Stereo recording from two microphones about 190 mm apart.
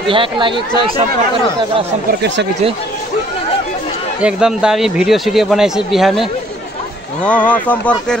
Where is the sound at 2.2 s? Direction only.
65° right (ahead or behind).